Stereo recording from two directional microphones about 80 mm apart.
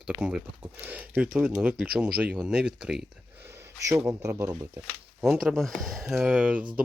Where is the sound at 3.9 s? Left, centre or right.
Right.